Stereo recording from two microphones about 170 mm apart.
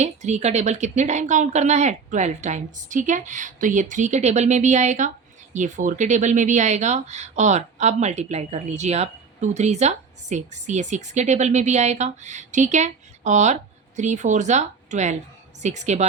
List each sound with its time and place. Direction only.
0.0 s speech: 40° right (ahead or behind)